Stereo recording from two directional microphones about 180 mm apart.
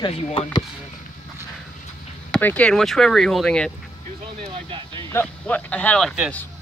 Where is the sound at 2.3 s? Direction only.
10° left (ahead or behind).